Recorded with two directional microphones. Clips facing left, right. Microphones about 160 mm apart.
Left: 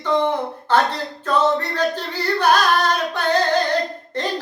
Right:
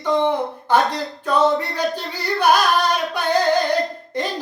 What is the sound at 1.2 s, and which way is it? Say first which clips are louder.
Singing: right 1 dB; 10° right (ahead or behind).